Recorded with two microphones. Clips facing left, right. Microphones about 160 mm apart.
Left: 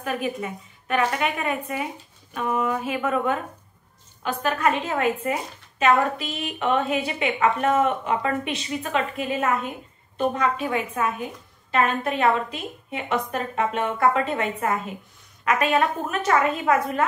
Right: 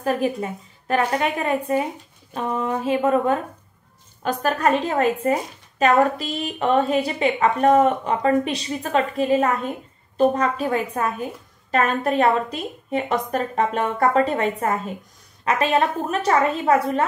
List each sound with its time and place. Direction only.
0.0 s a woman's voice: 35° right (ahead or behind)